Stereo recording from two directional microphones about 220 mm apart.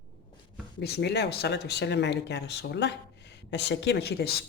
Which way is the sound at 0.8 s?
50° left (ahead or behind).